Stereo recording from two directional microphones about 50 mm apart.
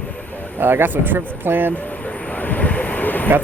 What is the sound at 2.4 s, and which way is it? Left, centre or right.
Vehicle, left.